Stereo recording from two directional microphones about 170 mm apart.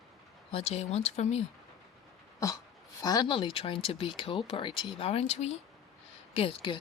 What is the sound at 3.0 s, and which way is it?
Speech, 20° left (ahead or behind).